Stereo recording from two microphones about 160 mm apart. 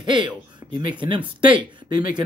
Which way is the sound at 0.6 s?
15° right (ahead or behind).